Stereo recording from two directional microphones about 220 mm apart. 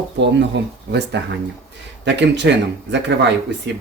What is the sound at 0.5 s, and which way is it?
Speech, 50° right (ahead or behind).